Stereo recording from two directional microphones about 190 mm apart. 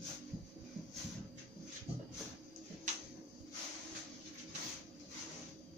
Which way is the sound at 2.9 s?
40° right (ahead or behind).